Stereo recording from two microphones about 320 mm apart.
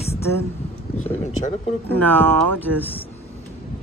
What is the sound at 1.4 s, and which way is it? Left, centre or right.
Speech, left.